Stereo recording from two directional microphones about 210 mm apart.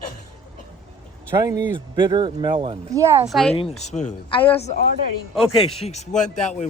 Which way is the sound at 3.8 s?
35° left (ahead or behind).